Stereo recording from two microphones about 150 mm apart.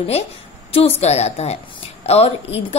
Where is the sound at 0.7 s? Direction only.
40° left (ahead or behind).